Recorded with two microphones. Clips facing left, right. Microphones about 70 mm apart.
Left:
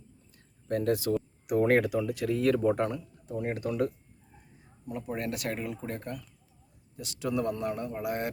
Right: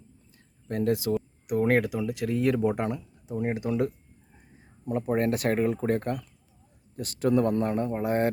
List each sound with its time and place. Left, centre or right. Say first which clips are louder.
1.1 s speech: even; centre; by 3.9 s right
4.9 s speech: right 8 dB; right